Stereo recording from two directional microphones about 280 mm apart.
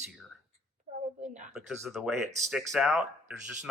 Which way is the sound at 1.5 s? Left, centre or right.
Centre.